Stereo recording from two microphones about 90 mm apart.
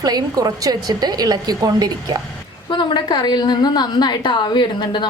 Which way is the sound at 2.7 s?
55° left (ahead or behind).